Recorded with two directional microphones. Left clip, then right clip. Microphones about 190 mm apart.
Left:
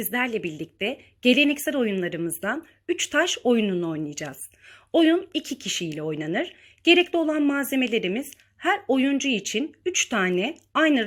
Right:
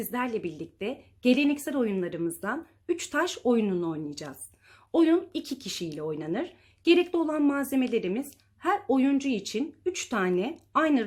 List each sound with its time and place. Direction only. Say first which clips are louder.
0.0 s speech: left 5 dB; 25° left (ahead or behind)